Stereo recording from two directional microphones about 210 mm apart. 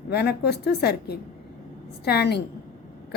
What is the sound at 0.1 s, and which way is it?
A woman's voice, 50° left (ahead or behind).